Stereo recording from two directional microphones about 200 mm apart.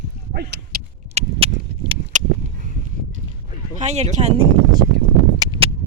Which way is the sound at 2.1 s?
40° right (ahead or behind).